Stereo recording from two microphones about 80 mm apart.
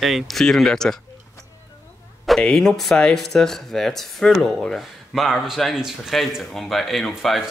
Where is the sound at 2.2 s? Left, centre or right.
Centre.